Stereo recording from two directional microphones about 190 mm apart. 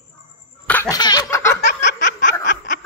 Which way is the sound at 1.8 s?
65° left (ahead or behind).